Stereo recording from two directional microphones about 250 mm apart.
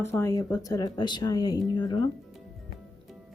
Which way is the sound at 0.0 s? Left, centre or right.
Centre.